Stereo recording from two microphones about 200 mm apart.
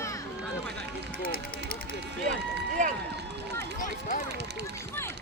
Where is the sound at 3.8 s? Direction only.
40° left (ahead or behind).